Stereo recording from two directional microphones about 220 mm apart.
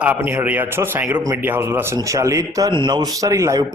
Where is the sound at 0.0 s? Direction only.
10° right (ahead or behind).